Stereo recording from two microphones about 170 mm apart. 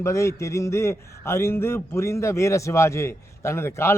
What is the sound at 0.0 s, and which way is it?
Speech, 15° left (ahead or behind).